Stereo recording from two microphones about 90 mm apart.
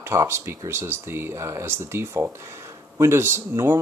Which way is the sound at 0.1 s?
30° right (ahead or behind).